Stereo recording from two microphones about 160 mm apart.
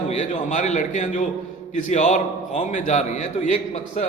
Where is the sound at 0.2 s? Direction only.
50° left (ahead or behind).